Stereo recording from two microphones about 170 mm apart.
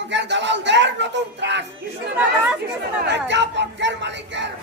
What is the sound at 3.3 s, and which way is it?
Speech, 90° right.